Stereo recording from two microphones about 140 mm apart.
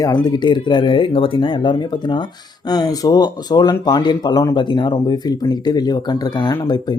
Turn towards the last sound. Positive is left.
turn(degrees=30)  # may be behind; listen again after turning